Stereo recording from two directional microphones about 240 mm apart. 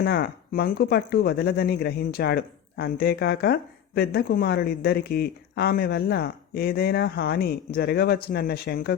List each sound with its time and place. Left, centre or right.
0.0 s speech: left